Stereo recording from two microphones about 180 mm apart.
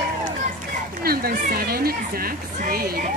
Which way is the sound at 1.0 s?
55° right (ahead or behind).